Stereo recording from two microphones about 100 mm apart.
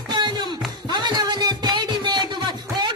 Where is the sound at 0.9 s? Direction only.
45° right (ahead or behind).